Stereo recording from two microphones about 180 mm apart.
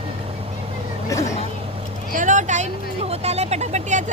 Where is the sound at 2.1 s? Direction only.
45° right (ahead or behind).